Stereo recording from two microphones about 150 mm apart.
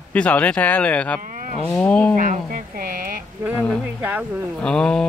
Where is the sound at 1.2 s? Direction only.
60° right (ahead or behind).